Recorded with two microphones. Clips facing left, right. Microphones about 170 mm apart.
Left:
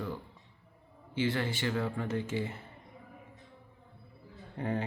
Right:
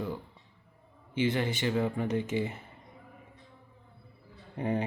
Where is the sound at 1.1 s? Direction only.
20° right (ahead or behind).